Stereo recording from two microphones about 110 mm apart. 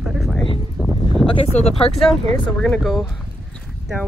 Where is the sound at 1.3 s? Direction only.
70° left (ahead or behind).